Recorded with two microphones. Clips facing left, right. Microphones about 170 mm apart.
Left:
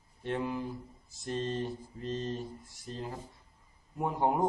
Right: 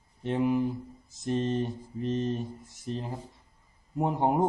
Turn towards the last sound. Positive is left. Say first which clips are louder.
# right 4 dB
turn(degrees=-25)  # may be behind; listen again after turning